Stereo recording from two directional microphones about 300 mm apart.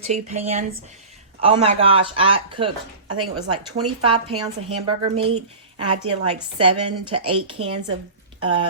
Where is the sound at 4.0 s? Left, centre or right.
Centre.